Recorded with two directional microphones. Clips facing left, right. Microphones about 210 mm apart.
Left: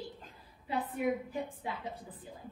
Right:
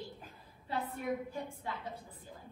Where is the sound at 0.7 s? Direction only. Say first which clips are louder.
Left 4 dB; 15° left (ahead or behind).